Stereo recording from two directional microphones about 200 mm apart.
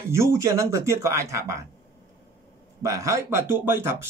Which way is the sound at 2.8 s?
15° right (ahead or behind).